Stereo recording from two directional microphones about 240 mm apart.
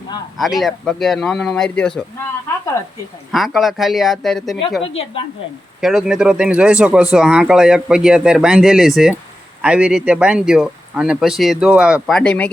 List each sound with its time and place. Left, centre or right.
0.3 s speech: centre
3.3 s speech: centre
4.8 s a woman's voice: left
5.8 s speech: centre